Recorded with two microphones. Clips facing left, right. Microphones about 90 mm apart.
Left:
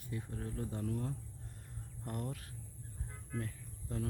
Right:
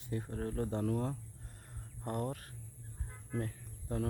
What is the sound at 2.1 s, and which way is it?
Speech, 40° right (ahead or behind).